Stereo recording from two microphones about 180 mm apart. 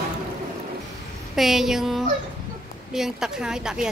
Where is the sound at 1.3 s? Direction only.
Centre (ahead or behind).